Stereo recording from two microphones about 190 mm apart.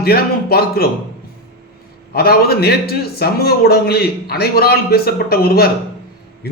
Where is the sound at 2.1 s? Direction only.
55° left (ahead or behind).